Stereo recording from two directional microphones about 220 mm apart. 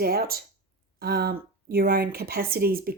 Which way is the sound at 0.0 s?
45° right (ahead or behind).